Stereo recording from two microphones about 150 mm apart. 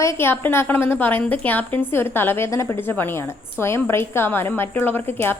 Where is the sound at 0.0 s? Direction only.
15° left (ahead or behind).